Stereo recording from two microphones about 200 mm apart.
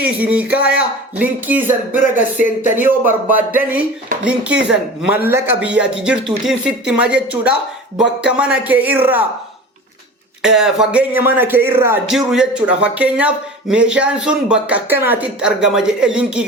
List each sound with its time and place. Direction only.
0.0 s speech: 5° right (ahead or behind)
0.4 s speech: 50° left (ahead or behind)
0.7 s speech: 5° right (ahead or behind)
10.4 s speech: 5° right (ahead or behind)